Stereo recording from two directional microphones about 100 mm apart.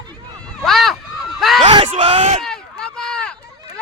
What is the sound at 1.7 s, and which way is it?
Speech, 50° right (ahead or behind).